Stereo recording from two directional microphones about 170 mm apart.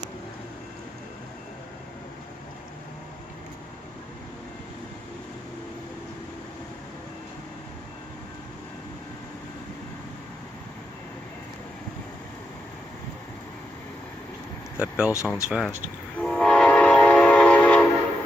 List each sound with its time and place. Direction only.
14.8 s speech: 5° right (ahead or behind)
15.1 s speech: 15° left (ahead or behind)
15.4 s speech: 5° right (ahead or behind)
16.2 s train: 5° left (ahead or behind)